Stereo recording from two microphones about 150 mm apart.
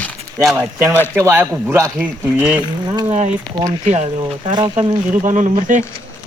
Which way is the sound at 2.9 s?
30° right (ahead or behind).